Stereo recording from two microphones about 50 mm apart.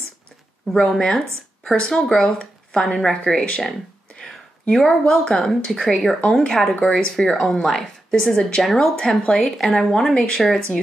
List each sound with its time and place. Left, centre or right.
0.7 s speech: centre
2.8 s speech: centre
3.1 s speech: centre